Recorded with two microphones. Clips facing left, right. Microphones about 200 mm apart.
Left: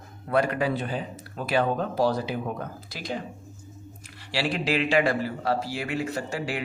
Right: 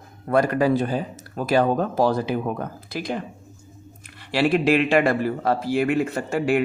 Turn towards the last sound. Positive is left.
turn(degrees=-55)  # may be behind; listen again after turning